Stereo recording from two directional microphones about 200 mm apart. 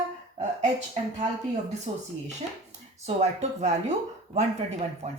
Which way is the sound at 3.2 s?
35° right (ahead or behind).